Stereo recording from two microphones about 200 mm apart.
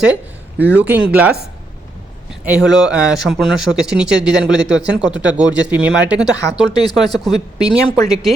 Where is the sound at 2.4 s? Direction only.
5° right (ahead or behind).